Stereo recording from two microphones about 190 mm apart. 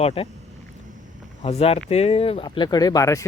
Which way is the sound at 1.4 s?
30° left (ahead or behind).